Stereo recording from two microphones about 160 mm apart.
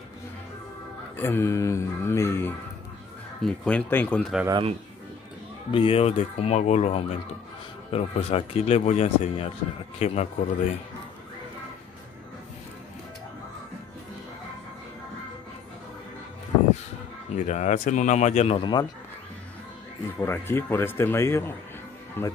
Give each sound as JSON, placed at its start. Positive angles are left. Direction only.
{"t": 1.1, "sound": "speech", "side_deg": 15}
{"t": 5.7, "sound": "speech", "side_deg": 35}
{"t": 17.3, "sound": "speech", "side_deg": 50}
{"t": 18.6, "sound": "speech", "side_deg": 30}
{"t": 20.2, "sound": "speech", "side_deg": 15}